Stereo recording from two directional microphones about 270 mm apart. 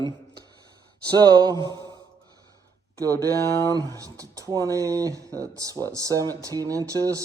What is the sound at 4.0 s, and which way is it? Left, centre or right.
Speech, centre.